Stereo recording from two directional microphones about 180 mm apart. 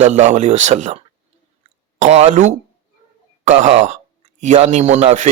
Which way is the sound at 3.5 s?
40° right (ahead or behind).